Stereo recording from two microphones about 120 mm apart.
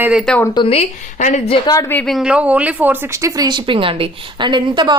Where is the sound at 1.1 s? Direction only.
90° left.